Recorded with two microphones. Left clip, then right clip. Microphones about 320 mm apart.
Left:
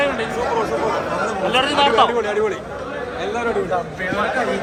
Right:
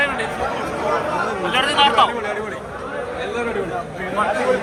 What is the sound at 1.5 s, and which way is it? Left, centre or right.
Speech, centre.